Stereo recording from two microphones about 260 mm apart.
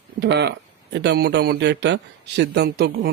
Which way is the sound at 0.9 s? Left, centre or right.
Right.